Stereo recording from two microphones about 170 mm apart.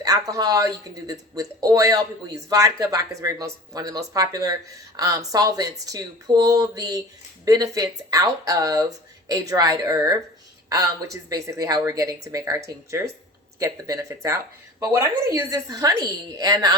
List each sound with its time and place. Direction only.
0.0 s speech: 20° right (ahead or behind)